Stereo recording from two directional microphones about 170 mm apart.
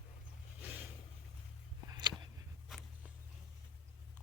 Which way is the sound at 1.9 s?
25° right (ahead or behind).